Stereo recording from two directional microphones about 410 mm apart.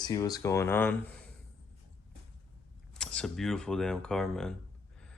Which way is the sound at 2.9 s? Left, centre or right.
Centre.